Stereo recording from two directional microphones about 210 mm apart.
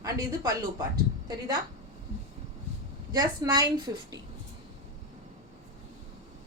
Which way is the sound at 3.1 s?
20° right (ahead or behind).